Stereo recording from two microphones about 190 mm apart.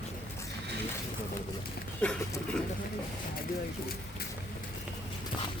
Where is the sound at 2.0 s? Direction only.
5° left (ahead or behind).